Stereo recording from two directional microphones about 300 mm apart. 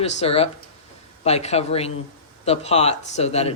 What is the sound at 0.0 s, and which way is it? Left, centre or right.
Speech, left.